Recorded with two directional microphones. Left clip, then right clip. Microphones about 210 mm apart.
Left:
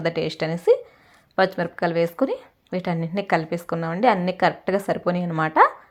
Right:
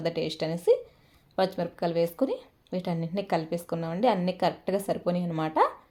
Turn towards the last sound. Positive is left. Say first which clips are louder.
# left 8 dB
turn(degrees=10)  # may be behind; listen again after turning